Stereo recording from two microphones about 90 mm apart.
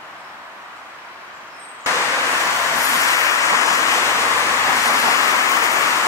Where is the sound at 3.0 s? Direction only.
35° left (ahead or behind).